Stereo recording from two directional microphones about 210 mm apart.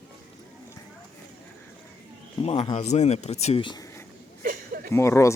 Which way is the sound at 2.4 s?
30° left (ahead or behind).